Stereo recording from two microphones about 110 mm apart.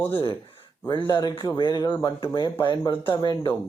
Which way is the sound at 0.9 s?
45° left (ahead or behind).